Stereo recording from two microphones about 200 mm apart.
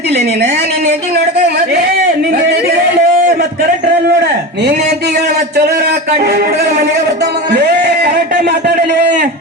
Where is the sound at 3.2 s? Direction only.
45° right (ahead or behind).